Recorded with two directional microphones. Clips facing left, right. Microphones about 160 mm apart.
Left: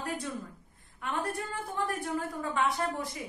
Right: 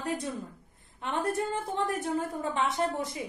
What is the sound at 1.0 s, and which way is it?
A woman's voice, 20° right (ahead or behind).